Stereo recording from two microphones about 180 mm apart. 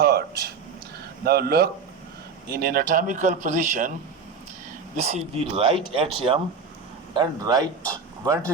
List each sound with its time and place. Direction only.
0.0 s a sound: 60° right (ahead or behind)
1.2 s a man's voice: 60° right (ahead or behind)
4.9 s speech: 40° right (ahead or behind); by 8.4 s 20° right (ahead or behind)